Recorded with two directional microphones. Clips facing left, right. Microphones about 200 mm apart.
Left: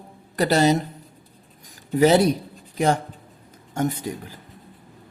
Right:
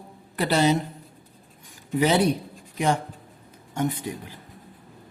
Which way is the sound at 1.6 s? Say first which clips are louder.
Left 5 dB; 40° left (ahead or behind).